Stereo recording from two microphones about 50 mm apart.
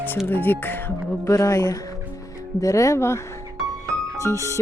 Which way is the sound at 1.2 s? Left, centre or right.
Left.